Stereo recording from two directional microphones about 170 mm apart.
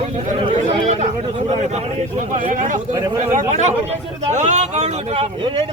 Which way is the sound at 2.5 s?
50° right (ahead or behind).